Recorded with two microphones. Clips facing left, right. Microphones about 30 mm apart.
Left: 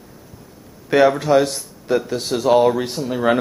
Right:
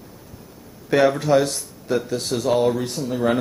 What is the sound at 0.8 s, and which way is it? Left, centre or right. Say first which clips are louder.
Speech: left 3 dB; centre.